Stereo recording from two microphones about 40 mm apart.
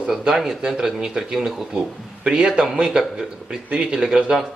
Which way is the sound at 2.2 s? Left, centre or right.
Right.